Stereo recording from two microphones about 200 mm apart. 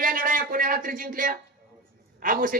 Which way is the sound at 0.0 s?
45° right (ahead or behind).